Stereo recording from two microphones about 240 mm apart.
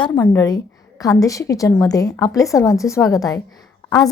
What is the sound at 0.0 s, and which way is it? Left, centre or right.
A woman's voice, centre.